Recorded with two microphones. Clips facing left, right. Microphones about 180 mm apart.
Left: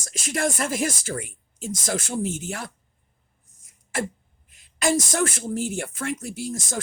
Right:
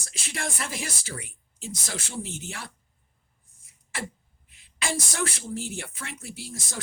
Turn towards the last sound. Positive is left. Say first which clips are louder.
# left 9 dB
turn(degrees=45)  # may be behind; listen again after turning